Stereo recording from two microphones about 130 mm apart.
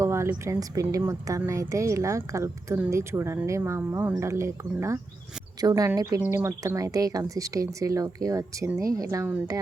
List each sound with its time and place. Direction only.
0.0 s a woman's voice: 20° right (ahead or behind)